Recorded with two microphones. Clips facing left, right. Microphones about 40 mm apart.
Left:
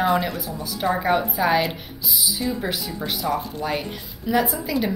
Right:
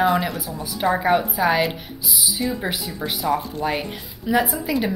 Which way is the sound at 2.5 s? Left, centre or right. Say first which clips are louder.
Even; centre.